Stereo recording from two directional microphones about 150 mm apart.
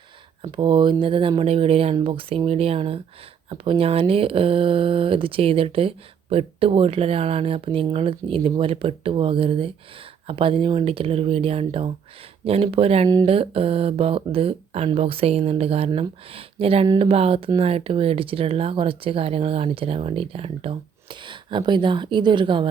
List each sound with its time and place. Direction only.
0.5 s speech: 30° right (ahead or behind)